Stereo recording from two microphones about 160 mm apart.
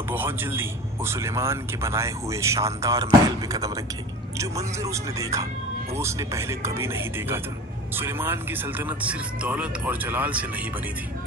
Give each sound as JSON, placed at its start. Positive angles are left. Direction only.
{"t": 0.1, "sound": "a man's voice", "side_deg": -15}